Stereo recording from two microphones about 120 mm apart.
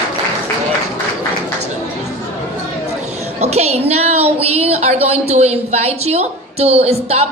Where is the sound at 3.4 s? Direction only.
65° right (ahead or behind).